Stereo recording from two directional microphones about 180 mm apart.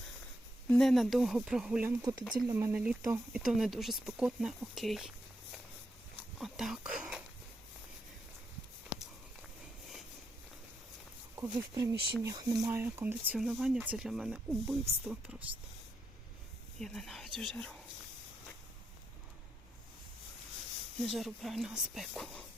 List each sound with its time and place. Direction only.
0.7 s speech: centre (ahead or behind)
2.0 s speech: 20° right (ahead or behind); by 5.1 s centre (ahead or behind)
6.4 s speech: centre (ahead or behind)
11.5 s speech: 20° right (ahead or behind)
16.8 s speech: centre (ahead or behind)
21.0 s speech: centre (ahead or behind)